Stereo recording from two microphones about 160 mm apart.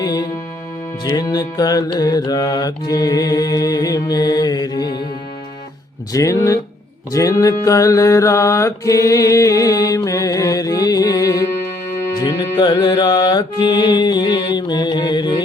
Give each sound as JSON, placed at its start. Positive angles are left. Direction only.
{"t": 0.0, "sound": "music", "side_deg": 25}
{"t": 1.0, "sound": "mantra", "side_deg": 25}
{"t": 6.1, "sound": "mantra", "side_deg": 20}